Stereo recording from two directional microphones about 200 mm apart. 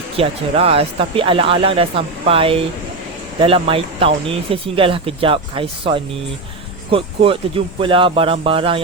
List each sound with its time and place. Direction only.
0.2 s speech: 30° right (ahead or behind)